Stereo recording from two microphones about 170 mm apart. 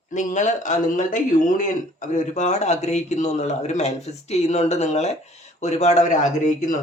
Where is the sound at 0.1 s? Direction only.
45° left (ahead or behind).